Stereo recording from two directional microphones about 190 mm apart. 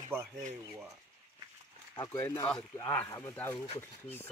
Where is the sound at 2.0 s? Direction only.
15° left (ahead or behind).